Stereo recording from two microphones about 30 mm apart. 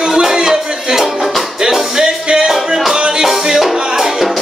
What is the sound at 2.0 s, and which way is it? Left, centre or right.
Music, right.